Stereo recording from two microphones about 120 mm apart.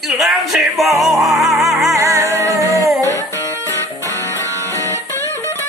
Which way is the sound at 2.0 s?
25° right (ahead or behind).